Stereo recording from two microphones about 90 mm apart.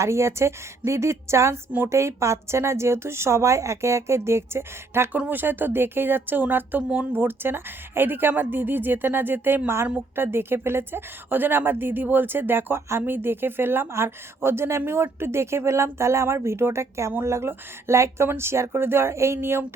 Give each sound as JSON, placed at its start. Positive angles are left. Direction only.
{"t": 0.0, "sound": "a woman's voice", "side_deg": -30}